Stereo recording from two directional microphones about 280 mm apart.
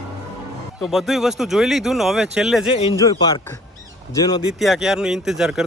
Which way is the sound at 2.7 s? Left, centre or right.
Centre.